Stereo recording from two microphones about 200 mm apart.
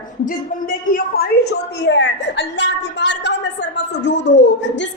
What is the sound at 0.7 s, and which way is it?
A woman's voice, 45° left (ahead or behind).